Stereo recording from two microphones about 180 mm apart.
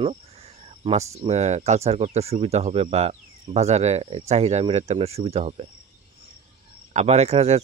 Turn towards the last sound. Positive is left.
turn(degrees=-35)  # may be behind; listen again after turning